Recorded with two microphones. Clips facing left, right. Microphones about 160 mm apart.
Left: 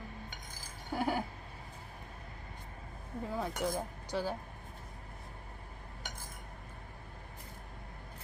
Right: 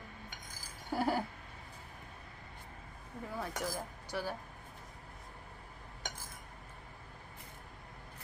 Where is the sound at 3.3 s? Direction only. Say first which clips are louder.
Left 4 dB; 20° left (ahead or behind).